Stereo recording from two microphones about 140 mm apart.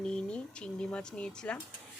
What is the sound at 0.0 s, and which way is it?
Speech, 5° left (ahead or behind).